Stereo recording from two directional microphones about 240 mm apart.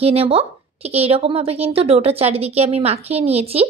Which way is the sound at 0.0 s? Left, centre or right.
Right.